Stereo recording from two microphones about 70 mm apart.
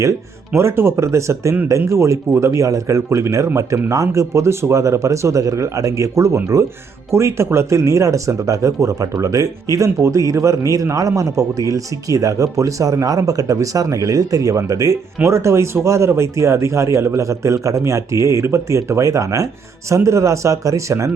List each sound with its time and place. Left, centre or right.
0.5 s speech: right